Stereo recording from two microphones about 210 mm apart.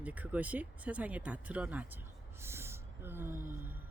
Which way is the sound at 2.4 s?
10° right (ahead or behind).